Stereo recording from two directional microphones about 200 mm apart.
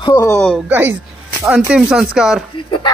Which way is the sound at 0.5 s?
10° right (ahead or behind).